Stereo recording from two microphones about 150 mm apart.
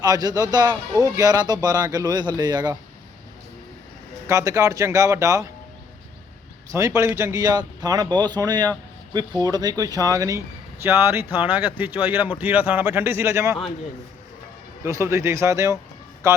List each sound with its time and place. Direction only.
0.0 s speech: 25° right (ahead or behind)
4.3 s speech: 20° right (ahead or behind)
6.7 s speech: 20° right (ahead or behind)
14.8 s speech: 20° right (ahead or behind)